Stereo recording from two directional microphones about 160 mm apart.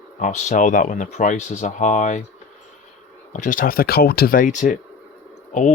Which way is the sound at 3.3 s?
55° left (ahead or behind).